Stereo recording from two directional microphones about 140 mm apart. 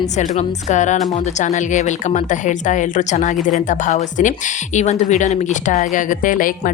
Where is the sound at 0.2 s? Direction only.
60° left (ahead or behind).